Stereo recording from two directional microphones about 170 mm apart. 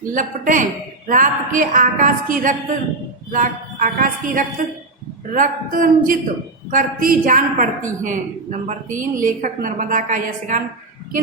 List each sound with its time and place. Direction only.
0.1 s a woman's voice: 50° right (ahead or behind)